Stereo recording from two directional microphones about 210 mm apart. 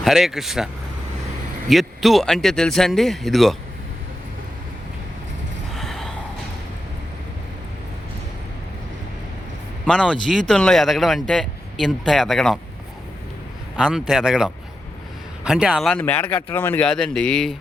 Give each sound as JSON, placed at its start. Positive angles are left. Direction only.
{"t": 0.0, "sound": "speech", "side_deg": 0}
{"t": 1.7, "sound": "speech", "side_deg": 0}
{"t": 5.7, "sound": "gasp", "side_deg": 0}
{"t": 9.8, "sound": "speech", "side_deg": 5}
{"t": 13.7, "sound": "speech", "side_deg": -5}